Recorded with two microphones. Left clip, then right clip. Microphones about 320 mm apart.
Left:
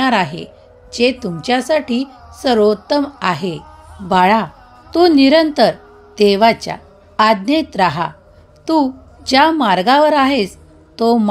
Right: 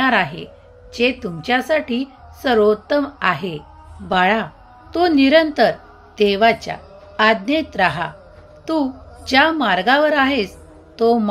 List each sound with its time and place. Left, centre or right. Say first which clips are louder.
0.0 s a woman's voice: left 2 dB; centre